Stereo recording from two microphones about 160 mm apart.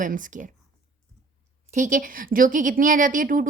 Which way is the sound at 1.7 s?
50° right (ahead or behind).